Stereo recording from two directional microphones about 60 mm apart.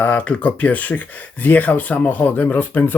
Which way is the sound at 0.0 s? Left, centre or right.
Left.